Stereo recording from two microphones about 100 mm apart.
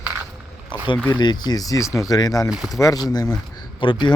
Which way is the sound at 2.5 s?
5° right (ahead or behind).